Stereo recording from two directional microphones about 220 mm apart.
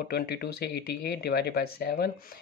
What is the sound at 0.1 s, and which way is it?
Speech, 45° left (ahead or behind).